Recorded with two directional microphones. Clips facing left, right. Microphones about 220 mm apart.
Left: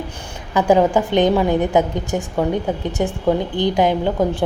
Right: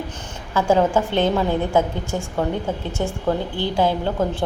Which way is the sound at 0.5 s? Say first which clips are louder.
Left 3 dB; 15° left (ahead or behind).